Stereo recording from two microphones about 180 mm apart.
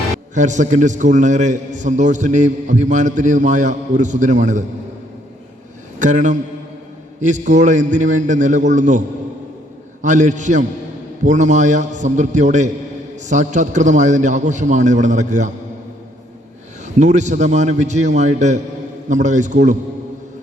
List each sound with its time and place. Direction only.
0.3 s a man's voice: 45° right (ahead or behind)
6.0 s a man's voice: 45° right (ahead or behind)
16.8 s a man's voice: 40° right (ahead or behind)